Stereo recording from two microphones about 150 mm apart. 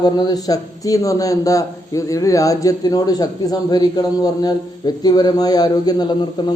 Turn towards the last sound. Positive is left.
turn(degrees=30)  # may be behind; listen again after turning